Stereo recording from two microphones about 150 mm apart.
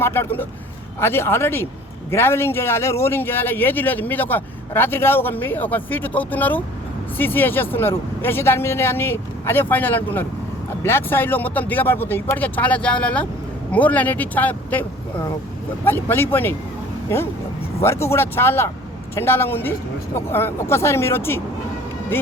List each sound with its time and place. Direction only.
0.0 s speech: 15° left (ahead or behind)
17.7 s speech: 15° left (ahead or behind)